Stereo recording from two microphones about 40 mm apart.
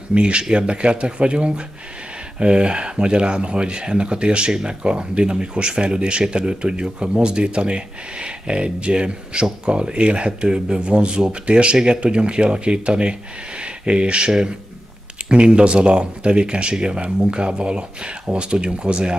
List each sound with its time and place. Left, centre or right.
0.1 s speech: right
13.6 s a sound: right
15.2 s speech: right